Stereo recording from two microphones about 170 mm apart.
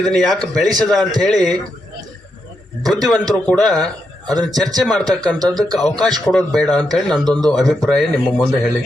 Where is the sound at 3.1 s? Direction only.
5° left (ahead or behind).